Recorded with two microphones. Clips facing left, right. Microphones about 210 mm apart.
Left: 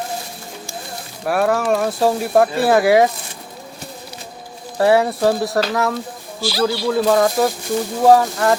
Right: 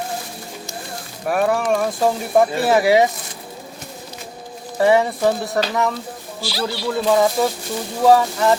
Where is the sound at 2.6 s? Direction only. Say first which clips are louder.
Left 1 dB; 20° right (ahead or behind).